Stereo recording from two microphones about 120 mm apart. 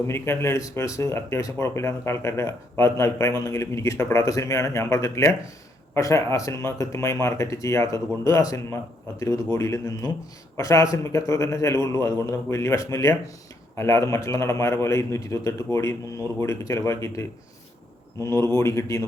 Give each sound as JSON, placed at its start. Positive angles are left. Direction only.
{"t": 0.1, "sound": "speech", "side_deg": 20}